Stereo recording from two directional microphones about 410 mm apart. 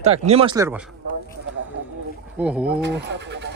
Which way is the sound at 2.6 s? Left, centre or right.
Right.